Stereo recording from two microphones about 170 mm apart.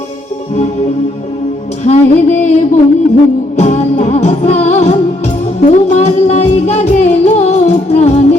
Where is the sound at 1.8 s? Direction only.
45° left (ahead or behind).